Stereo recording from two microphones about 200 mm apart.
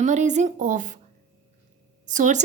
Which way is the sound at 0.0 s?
35° right (ahead or behind).